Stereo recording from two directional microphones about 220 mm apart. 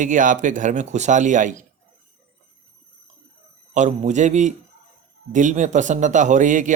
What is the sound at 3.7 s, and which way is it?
Speech, 35° right (ahead or behind).